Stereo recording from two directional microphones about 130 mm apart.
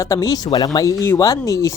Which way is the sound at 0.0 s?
25° left (ahead or behind).